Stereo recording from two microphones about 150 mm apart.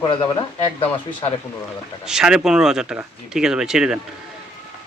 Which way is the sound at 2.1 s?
5° right (ahead or behind).